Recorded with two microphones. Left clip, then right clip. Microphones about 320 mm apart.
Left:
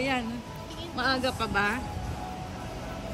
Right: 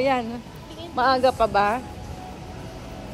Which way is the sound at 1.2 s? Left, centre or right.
Centre.